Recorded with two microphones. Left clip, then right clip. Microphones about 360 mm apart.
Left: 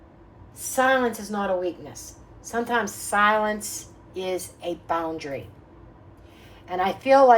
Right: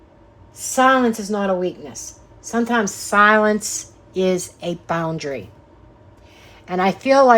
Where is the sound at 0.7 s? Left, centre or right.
Right.